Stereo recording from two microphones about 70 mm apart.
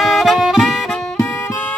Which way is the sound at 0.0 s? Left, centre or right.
Centre.